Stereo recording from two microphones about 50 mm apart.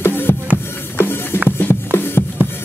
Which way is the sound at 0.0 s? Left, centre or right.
Left.